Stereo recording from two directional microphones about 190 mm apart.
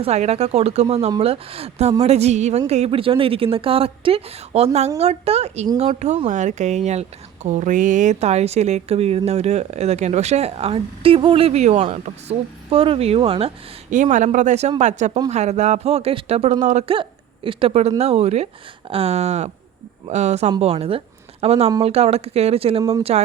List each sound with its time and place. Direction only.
0.0 s speech: 35° right (ahead or behind)
13.9 s speech: 40° right (ahead or behind)